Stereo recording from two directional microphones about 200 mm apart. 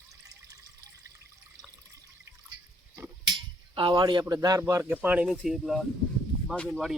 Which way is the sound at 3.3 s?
25° right (ahead or behind).